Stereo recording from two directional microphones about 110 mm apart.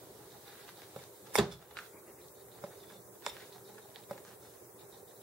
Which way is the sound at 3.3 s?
Centre (ahead or behind).